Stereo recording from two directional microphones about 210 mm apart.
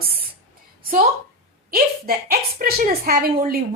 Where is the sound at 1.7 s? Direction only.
45° right (ahead or behind).